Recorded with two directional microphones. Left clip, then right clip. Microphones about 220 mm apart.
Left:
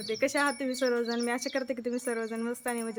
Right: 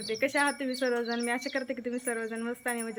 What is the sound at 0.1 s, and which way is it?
Speech, 10° left (ahead or behind).